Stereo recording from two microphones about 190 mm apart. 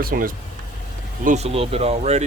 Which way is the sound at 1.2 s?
35° right (ahead or behind).